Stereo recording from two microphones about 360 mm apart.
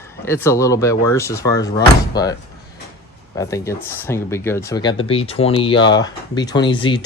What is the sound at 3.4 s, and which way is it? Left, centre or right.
Speech, centre.